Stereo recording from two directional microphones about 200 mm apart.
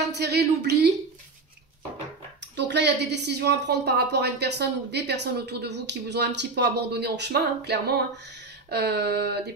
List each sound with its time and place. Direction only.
0.1 s a woman's voice: 55° right (ahead or behind)
2.5 s a woman's voice: 60° right (ahead or behind)